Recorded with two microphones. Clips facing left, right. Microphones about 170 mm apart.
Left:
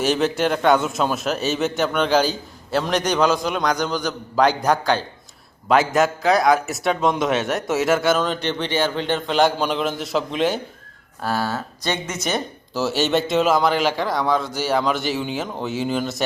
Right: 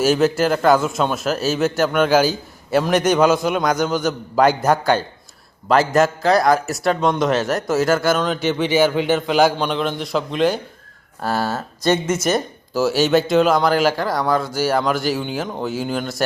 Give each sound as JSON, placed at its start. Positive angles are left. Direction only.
{"t": 0.0, "sound": "a man's voice", "side_deg": -5}
{"t": 11.5, "sound": "speech", "side_deg": -45}
{"t": 12.2, "sound": "a man's voice", "side_deg": 0}